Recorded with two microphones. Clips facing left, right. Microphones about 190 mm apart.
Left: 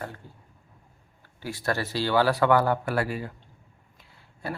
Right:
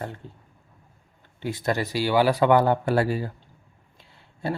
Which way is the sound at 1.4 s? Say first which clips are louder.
Right 3 dB; 20° right (ahead or behind).